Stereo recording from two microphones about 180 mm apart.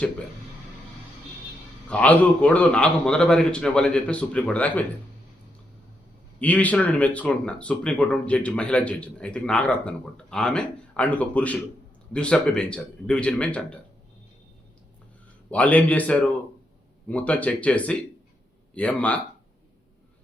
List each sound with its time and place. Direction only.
1.9 s speech: 5° left (ahead or behind)
6.4 s speech: 10° left (ahead or behind)
15.4 s speech: 10° left (ahead or behind)